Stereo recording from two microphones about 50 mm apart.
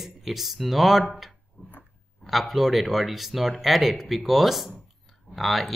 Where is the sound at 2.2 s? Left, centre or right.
Centre.